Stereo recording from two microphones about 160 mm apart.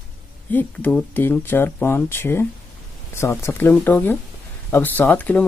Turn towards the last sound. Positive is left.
turn(degrees=10)  # may be behind; listen again after turning